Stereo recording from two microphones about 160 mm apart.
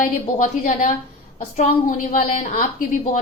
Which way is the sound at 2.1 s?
50° left (ahead or behind).